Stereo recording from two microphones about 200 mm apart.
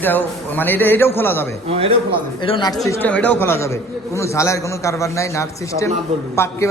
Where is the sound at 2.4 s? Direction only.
20° left (ahead or behind).